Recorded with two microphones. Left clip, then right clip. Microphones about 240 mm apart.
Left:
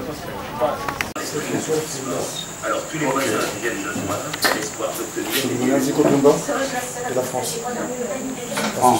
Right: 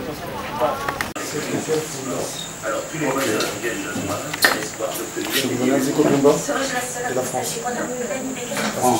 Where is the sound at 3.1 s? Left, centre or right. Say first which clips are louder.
Even; centre.